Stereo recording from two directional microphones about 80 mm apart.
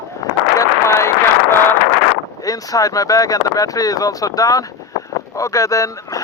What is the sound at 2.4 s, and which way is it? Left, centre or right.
Speech, left.